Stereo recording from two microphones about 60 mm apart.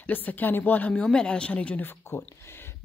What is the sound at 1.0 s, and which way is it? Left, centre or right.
Speech, centre.